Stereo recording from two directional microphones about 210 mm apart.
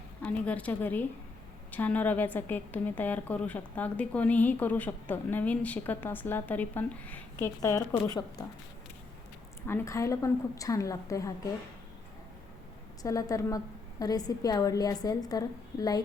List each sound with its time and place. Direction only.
0.2 s a woman's voice: 5° left (ahead or behind)
9.6 s a woman's voice: 10° left (ahead or behind)
13.0 s a woman's voice: 15° left (ahead or behind)